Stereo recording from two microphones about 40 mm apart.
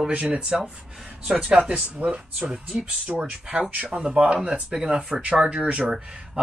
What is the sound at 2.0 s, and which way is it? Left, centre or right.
Speech, right.